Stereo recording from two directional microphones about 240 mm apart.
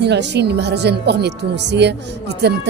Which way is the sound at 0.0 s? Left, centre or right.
Right.